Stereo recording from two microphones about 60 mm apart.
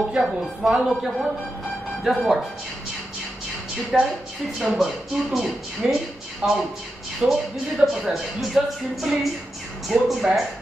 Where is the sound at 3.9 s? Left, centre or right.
Centre.